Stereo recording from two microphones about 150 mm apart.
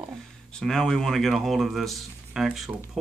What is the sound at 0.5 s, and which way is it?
Speech, 5° left (ahead or behind).